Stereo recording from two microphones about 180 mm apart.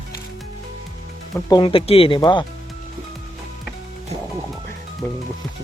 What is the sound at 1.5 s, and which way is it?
Speech, 30° left (ahead or behind).